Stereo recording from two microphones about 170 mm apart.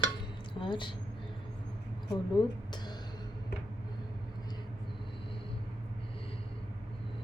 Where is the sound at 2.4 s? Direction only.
25° left (ahead or behind).